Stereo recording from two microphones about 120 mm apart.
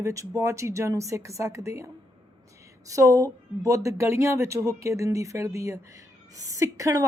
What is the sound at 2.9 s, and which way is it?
Speech, 25° right (ahead or behind).